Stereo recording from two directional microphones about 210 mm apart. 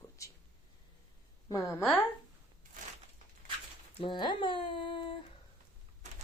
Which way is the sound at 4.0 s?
20° left (ahead or behind).